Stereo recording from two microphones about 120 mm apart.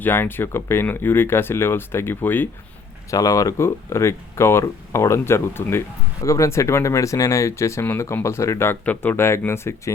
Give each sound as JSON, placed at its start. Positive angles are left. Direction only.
{"t": 0.0, "sound": "speech", "side_deg": 20}
{"t": 3.1, "sound": "speech", "side_deg": 30}